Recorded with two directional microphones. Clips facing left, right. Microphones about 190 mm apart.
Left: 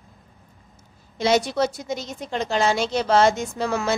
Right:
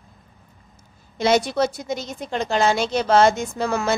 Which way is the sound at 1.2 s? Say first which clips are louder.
Right 1 dB; 55° right (ahead or behind).